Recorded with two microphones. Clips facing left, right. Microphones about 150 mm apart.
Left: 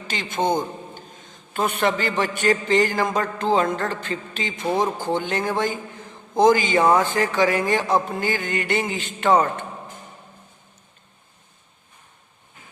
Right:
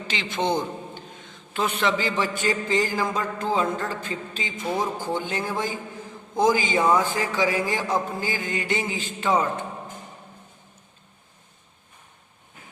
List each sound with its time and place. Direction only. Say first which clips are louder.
0.1 s a man's voice: left 3 dB; 50° left (ahead or behind); by 9.6 s 65° left (ahead or behind)